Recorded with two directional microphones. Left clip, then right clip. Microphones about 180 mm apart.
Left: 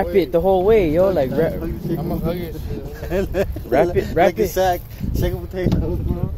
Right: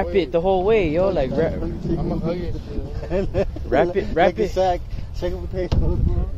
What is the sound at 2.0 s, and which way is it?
Speech, 5° left (ahead or behind).